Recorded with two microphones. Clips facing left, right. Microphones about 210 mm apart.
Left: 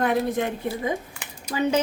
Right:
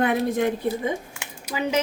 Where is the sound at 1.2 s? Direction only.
10° right (ahead or behind).